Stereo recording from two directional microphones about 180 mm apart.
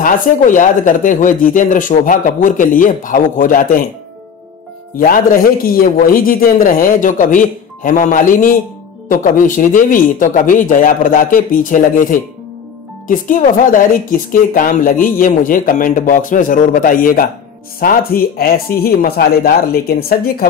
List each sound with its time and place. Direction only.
0.0 s speech: 45° left (ahead or behind)
4.9 s speech: 50° left (ahead or behind)